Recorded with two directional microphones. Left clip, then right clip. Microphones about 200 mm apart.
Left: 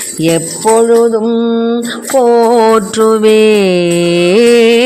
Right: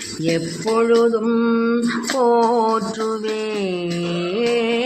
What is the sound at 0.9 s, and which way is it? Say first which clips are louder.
Mantra: left 7 dB; 30° left (ahead or behind).